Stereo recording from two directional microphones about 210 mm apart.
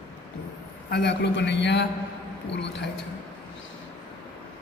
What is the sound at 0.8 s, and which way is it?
A man's voice, 55° left (ahead or behind).